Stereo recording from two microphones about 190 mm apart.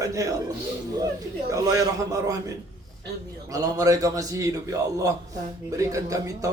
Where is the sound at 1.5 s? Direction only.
20° right (ahead or behind).